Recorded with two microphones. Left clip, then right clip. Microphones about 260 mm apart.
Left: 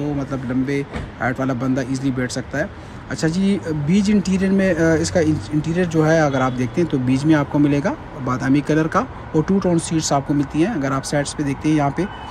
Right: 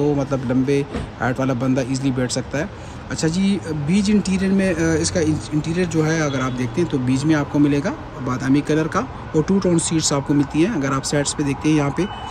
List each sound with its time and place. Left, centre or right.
0.0 s speech: centre